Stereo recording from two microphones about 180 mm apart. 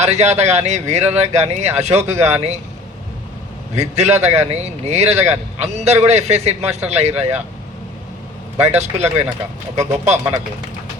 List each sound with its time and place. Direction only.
0.0 s speech: 40° right (ahead or behind)
3.8 s speech: 40° right (ahead or behind)
8.8 s speech: 40° right (ahead or behind)